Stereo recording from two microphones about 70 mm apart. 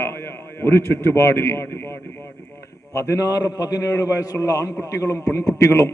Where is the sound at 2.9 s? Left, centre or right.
Left.